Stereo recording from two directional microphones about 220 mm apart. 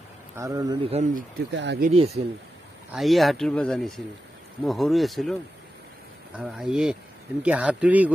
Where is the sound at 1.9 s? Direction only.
30° right (ahead or behind).